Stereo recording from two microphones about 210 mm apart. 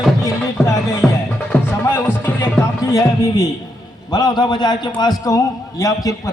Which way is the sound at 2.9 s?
15° left (ahead or behind).